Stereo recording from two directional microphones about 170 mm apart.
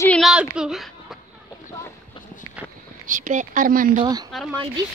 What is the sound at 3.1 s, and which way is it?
Speech, 50° right (ahead or behind).